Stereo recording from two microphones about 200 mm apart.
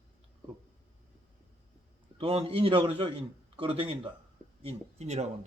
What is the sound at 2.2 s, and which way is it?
A man's voice, 30° right (ahead or behind).